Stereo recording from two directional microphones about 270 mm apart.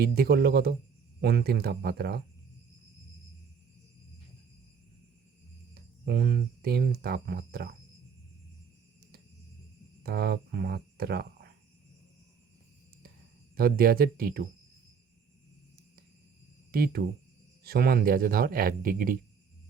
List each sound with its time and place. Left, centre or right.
0.0 s speech: right
5.7 s speech: right
10.0 s speech: right
13.6 s speech: right
16.7 s speech: right